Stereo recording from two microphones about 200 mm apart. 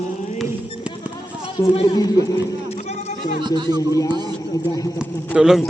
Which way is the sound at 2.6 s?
35° left (ahead or behind).